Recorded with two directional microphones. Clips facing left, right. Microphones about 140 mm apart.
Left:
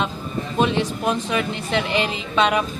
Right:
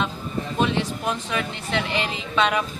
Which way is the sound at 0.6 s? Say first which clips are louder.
Left 3 dB; 20° left (ahead or behind).